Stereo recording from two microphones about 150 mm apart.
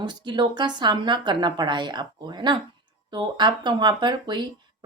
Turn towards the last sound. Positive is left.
turn(degrees=-30)  # may be behind; listen again after turning